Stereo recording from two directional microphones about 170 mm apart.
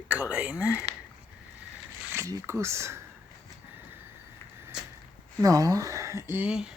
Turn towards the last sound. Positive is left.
turn(degrees=-5)  # may be behind; listen again after turning